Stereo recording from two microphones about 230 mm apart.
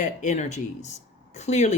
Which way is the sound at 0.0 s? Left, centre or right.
Left.